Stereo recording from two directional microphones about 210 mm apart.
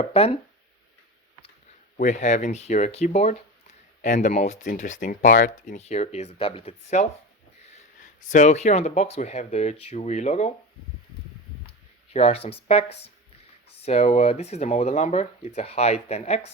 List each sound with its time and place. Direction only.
0.0 s speech: 25° left (ahead or behind)
2.0 s speech: 35° left (ahead or behind)
8.3 s speech: 35° left (ahead or behind)
12.1 s speech: 30° left (ahead or behind)